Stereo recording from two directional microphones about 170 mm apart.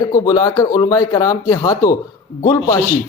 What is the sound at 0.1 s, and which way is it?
Speech, 20° left (ahead or behind).